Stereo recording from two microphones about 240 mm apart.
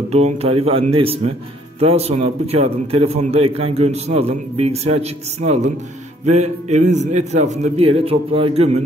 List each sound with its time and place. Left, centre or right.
0.1 s a man's voice: right